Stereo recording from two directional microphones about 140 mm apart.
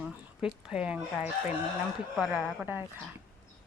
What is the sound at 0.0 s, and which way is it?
Speech, 5° right (ahead or behind).